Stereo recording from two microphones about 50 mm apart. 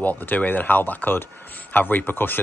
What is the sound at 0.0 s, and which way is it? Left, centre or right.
Speech, left.